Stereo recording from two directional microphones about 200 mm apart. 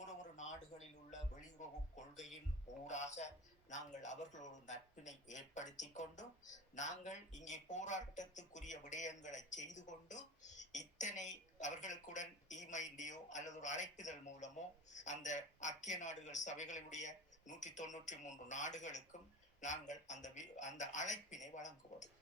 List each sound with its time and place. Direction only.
0.0 s music: 35° left (ahead or behind)
2.8 s a man's voice: 35° left (ahead or behind)